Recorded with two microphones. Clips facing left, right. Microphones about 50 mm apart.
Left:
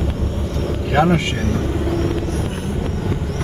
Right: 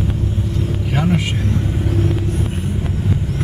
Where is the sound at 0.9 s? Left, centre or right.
Left.